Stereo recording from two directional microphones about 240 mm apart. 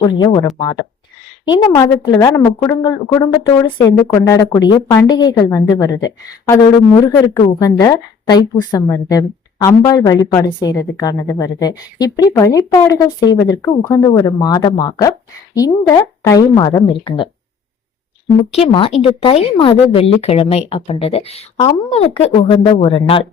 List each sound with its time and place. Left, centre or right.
0.0 s a woman's voice: centre
18.5 s speech: left